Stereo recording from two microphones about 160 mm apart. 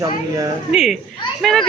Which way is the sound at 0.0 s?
20° right (ahead or behind).